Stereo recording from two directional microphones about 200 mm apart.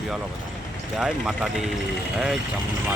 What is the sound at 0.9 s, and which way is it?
Speech, centre (ahead or behind).